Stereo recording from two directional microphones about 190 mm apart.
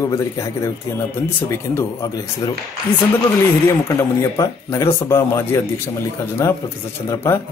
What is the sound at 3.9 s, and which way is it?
Speech, 15° left (ahead or behind).